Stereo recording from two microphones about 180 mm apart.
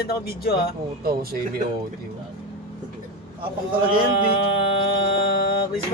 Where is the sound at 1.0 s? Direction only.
55° right (ahead or behind).